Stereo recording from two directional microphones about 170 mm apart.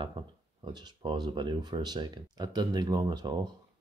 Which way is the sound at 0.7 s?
25° right (ahead or behind).